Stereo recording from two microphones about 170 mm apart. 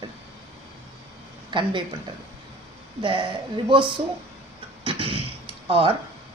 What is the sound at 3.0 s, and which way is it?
Speech, 30° right (ahead or behind).